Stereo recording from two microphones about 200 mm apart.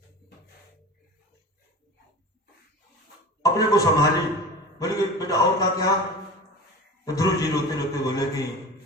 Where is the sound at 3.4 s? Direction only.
20° left (ahead or behind).